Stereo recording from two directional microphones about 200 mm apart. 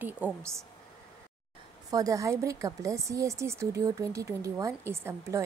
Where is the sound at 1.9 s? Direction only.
20° right (ahead or behind).